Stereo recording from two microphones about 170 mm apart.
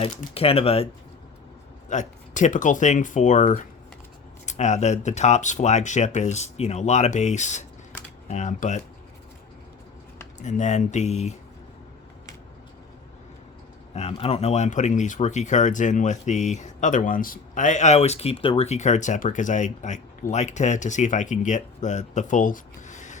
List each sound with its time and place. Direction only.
0.3 s speech: 35° left (ahead or behind)
1.9 s speech: 45° left (ahead or behind)
10.4 s speech: 45° left (ahead or behind)
13.9 s speech: 35° left (ahead or behind)